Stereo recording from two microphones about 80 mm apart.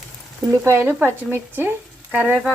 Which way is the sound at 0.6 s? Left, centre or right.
Right.